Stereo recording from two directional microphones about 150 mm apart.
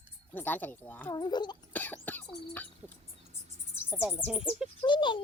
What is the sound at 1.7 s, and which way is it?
Cough, 10° left (ahead or behind).